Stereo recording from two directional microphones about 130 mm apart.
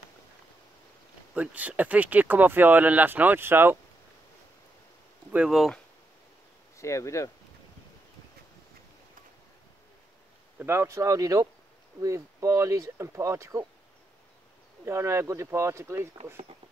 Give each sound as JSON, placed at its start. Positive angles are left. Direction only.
{"t": 1.3, "sound": "speech", "side_deg": -10}
{"t": 5.3, "sound": "speech", "side_deg": -5}
{"t": 6.8, "sound": "speech", "side_deg": 25}
{"t": 10.6, "sound": "speech", "side_deg": -20}
{"t": 14.9, "sound": "speech", "side_deg": -20}